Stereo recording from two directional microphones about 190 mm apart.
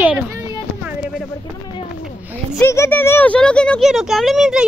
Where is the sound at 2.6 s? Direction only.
15° left (ahead or behind); by 4.7 s 5° right (ahead or behind).